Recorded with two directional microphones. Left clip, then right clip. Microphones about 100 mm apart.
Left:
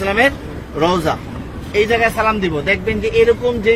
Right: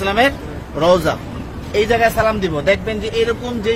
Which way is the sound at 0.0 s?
35° right (ahead or behind).